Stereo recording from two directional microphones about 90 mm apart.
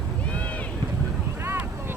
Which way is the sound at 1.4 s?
25° right (ahead or behind).